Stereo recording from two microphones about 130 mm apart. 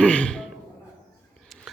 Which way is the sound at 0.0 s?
10° left (ahead or behind).